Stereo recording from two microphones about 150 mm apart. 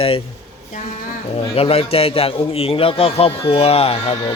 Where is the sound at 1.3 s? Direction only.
40° left (ahead or behind).